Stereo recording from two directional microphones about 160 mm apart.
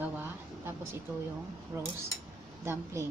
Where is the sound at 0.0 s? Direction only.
10° right (ahead or behind).